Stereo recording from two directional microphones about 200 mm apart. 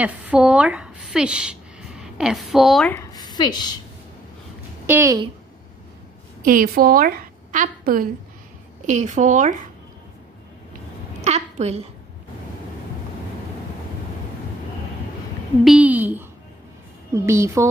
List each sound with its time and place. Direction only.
0.0 s a woman's voice: 5° right (ahead or behind)
2.9 s a woman's voice: 15° left (ahead or behind)
4.8 s a woman's voice: 15° right (ahead or behind)
6.4 s a woman's voice: 45° right (ahead or behind)
11.1 s a woman's voice: 35° right (ahead or behind)
15.6 s a woman's voice: 5° right (ahead or behind)